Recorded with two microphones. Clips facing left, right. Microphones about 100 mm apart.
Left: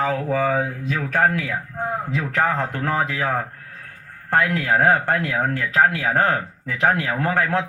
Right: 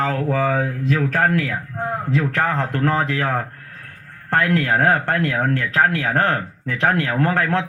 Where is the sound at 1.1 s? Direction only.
20° left (ahead or behind).